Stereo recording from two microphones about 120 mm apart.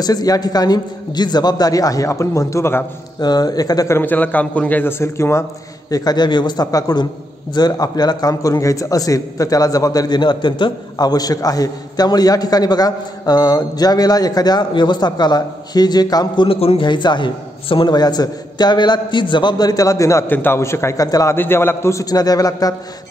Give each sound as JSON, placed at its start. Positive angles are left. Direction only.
{"t": 0.0, "sound": "a man's voice", "side_deg": 30}
{"t": 3.2, "sound": "a man's voice", "side_deg": 35}
{"t": 4.0, "sound": "a man's voice", "side_deg": 15}
{"t": 5.9, "sound": "a man's voice", "side_deg": 30}
{"t": 16.4, "sound": "a man's voice", "side_deg": 50}